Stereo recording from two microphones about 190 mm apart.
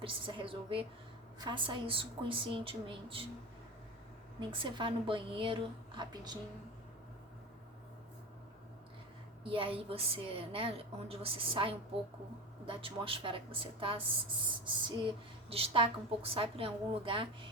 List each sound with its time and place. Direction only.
0.0 s a woman's voice: 25° right (ahead or behind)
4.4 s a woman's voice: 25° right (ahead or behind)
9.4 s a woman's voice: 30° right (ahead or behind)